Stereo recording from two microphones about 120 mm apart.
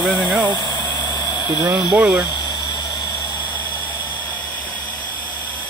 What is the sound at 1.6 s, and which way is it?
Speech, 10° right (ahead or behind).